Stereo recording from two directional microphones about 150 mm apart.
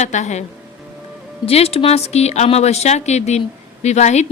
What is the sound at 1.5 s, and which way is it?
A woman's voice, 40° left (ahead or behind).